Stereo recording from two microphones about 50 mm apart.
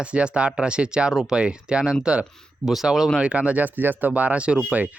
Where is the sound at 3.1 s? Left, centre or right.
Right.